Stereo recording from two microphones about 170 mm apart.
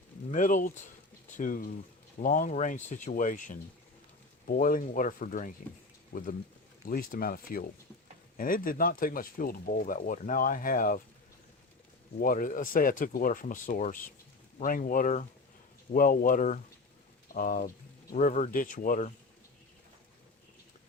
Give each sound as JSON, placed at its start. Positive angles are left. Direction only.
{"t": 0.3, "sound": "speech", "side_deg": 50}
{"t": 6.8, "sound": "speech", "side_deg": 60}
{"t": 12.2, "sound": "speech", "side_deg": 55}